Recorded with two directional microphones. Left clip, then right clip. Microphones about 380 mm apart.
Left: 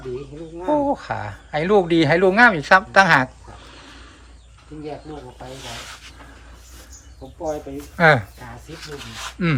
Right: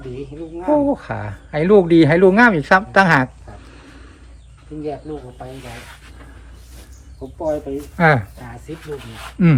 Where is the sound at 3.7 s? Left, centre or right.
Centre.